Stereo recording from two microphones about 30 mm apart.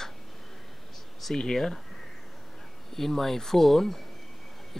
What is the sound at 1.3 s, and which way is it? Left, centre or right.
Speech, centre.